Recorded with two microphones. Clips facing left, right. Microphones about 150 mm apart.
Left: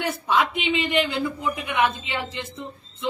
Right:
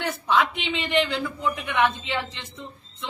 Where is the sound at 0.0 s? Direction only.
10° left (ahead or behind).